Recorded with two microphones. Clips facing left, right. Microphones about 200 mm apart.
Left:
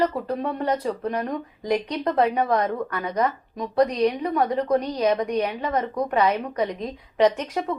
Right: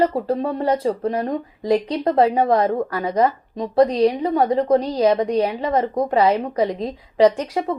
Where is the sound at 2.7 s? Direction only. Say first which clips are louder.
Right 5 dB; 40° right (ahead or behind).